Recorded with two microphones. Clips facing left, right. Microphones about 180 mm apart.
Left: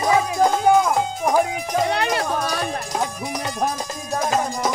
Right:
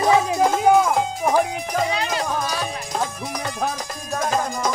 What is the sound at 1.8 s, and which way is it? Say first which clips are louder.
Music: left 2 dB; 65° left (ahead or behind).